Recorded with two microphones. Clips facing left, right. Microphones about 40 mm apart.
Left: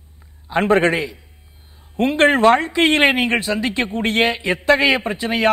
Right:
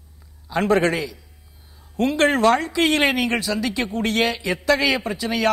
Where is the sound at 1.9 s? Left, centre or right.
Left.